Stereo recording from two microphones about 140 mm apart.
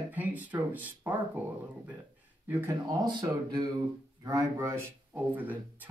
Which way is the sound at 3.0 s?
30° right (ahead or behind).